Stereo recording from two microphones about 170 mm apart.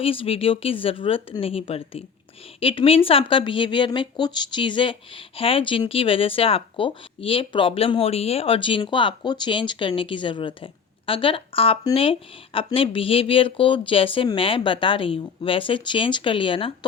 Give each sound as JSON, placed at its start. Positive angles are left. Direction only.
{"t": 0.0, "sound": "speech", "side_deg": 35}